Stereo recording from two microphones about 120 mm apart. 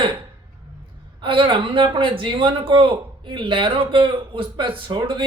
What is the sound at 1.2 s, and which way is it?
Speech, 45° right (ahead or behind).